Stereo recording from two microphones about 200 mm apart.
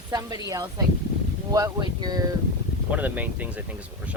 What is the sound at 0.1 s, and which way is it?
Speech, 20° right (ahead or behind).